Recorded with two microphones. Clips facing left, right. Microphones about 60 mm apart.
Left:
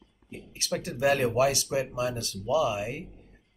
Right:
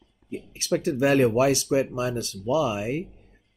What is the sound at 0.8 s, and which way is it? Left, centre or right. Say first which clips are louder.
Speech: right 5 dB; right.